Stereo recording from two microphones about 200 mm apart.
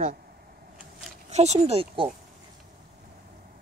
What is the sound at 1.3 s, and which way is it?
Speech, 35° right (ahead or behind).